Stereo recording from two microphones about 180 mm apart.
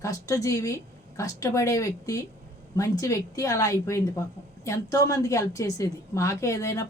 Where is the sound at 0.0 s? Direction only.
20° left (ahead or behind).